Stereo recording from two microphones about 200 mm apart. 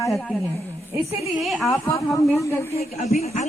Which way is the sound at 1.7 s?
15° left (ahead or behind).